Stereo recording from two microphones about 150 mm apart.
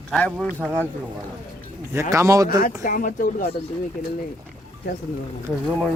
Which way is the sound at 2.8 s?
60° left (ahead or behind).